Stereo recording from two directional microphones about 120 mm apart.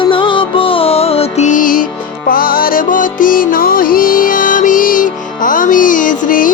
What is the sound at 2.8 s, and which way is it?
Music, 90° left.